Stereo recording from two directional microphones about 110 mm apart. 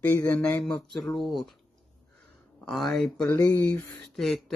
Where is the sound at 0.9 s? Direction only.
5° left (ahead or behind).